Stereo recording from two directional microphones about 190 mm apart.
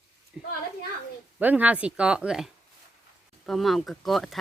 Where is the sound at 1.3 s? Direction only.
10° right (ahead or behind).